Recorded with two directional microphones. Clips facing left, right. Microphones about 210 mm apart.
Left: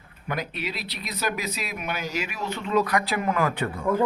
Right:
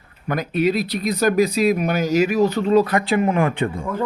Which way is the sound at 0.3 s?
45° right (ahead or behind).